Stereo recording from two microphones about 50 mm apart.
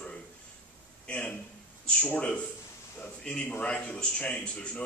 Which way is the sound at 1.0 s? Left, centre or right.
Left.